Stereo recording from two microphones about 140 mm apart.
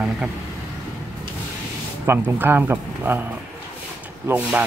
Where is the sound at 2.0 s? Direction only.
15° right (ahead or behind).